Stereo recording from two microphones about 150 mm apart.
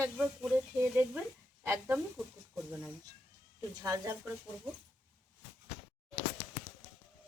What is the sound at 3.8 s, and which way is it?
Speech, 20° right (ahead or behind).